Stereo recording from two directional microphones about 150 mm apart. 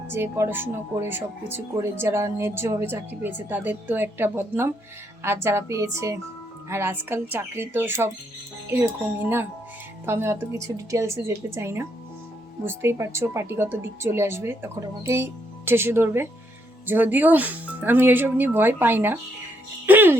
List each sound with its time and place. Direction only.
0.1 s speech: 15° right (ahead or behind)